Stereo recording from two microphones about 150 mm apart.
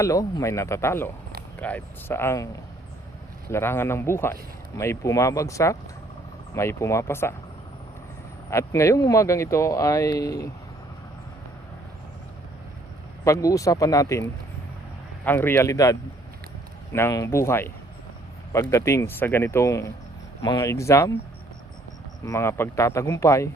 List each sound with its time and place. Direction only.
0.0 s speech: 20° left (ahead or behind)
3.5 s speech: 15° left (ahead or behind)
8.4 s speech: 20° left (ahead or behind)
13.2 s speech: 20° left (ahead or behind)
22.2 s speech: 20° left (ahead or behind)